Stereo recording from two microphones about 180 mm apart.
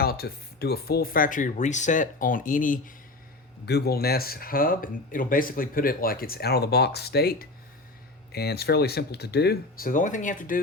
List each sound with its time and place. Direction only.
0.0 s speech: 60° left (ahead or behind)
3.7 s speech: 60° left (ahead or behind)